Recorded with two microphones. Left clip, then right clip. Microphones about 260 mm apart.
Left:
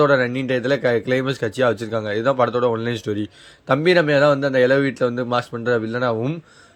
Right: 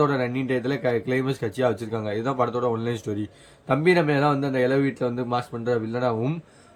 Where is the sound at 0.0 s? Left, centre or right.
Centre.